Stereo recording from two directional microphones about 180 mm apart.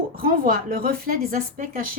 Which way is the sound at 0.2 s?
55° right (ahead or behind).